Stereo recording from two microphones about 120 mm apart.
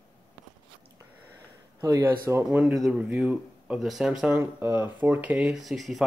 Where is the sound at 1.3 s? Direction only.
20° right (ahead or behind).